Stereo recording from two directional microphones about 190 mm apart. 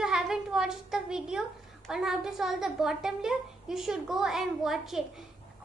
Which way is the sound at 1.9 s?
Centre (ahead or behind).